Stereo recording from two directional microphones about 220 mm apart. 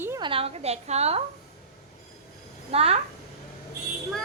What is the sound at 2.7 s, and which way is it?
Speech, 25° right (ahead or behind).